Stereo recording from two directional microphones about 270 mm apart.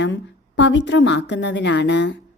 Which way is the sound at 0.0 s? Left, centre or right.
Left.